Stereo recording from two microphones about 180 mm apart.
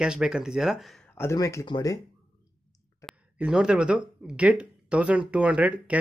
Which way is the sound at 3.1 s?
5° right (ahead or behind).